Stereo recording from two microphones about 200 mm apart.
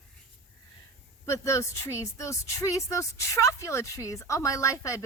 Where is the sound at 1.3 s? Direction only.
15° left (ahead or behind).